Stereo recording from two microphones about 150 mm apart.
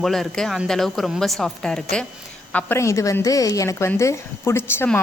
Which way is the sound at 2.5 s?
15° left (ahead or behind).